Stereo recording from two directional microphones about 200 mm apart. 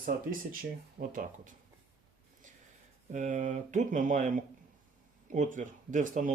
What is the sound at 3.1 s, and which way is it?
Speech, 40° right (ahead or behind).